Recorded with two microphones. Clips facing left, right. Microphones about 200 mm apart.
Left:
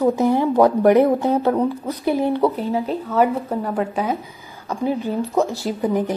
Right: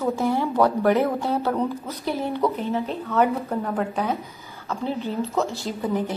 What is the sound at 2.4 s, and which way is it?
Speech, 30° left (ahead or behind).